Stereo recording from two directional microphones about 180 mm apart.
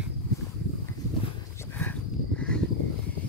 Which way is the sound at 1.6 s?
10° left (ahead or behind).